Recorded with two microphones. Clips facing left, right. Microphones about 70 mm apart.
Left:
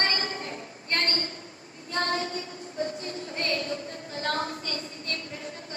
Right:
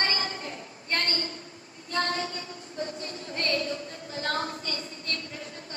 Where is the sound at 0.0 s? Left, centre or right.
Left.